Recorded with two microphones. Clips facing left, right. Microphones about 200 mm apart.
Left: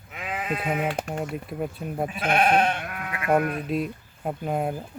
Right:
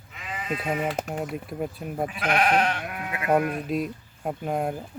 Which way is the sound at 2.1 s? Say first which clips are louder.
Left 2 dB; 25° left (ahead or behind).